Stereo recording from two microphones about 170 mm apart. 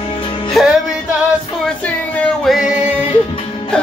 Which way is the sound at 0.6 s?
Centre (ahead or behind).